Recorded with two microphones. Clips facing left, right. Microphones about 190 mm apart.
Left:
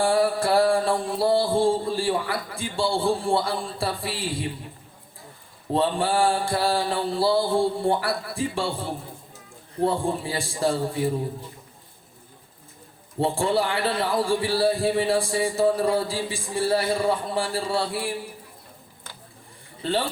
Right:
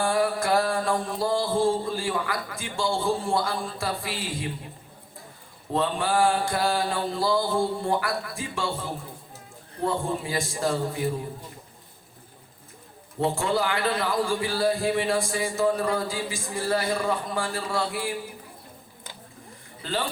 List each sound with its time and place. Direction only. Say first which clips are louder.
0.0 s a man's voice: left 3 dB; 30° left (ahead or behind)
5.7 s a man's voice: left 2 dB; 30° left (ahead or behind)
13.1 s a man's voice: left 2 dB; 30° left (ahead or behind)
19.8 s speech: left 4 dB; 30° left (ahead or behind)